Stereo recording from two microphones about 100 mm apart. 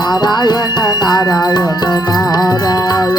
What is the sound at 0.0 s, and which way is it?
Music, 45° left (ahead or behind).